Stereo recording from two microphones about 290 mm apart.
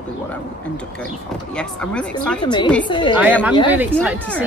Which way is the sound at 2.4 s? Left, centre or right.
Centre.